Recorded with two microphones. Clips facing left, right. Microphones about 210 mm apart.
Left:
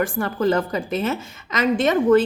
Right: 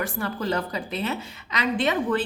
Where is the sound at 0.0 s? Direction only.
50° left (ahead or behind).